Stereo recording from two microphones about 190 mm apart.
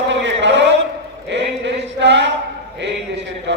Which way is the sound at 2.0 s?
70° right (ahead or behind).